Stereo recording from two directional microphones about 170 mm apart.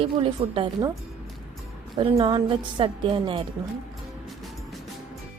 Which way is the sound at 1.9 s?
30° right (ahead or behind).